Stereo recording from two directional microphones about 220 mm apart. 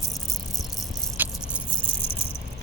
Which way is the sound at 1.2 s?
10° right (ahead or behind).